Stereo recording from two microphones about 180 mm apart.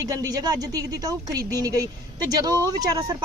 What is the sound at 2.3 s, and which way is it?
Speech, 20° right (ahead or behind).